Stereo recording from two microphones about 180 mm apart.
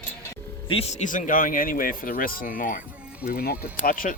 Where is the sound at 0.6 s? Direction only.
35° left (ahead or behind).